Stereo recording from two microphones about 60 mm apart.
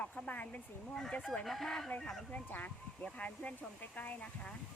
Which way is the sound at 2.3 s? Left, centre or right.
Left.